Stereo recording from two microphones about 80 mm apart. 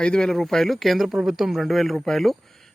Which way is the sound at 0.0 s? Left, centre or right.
Centre.